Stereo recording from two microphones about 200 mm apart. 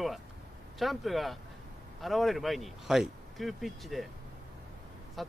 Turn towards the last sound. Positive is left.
turn(degrees=0)  # may be behind; listen again after turning